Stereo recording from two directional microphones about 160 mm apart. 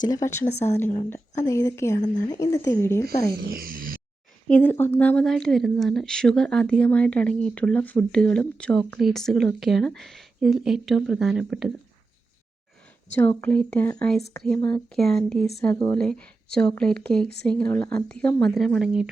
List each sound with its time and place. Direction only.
0.0 s speech: 20° left (ahead or behind)
3.3 s a sound: 70° right (ahead or behind)
4.4 s a woman's voice: 10° left (ahead or behind)
13.1 s a woman's voice: 10° left (ahead or behind)